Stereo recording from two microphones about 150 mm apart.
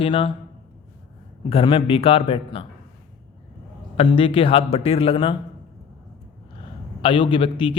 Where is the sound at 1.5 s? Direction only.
35° left (ahead or behind).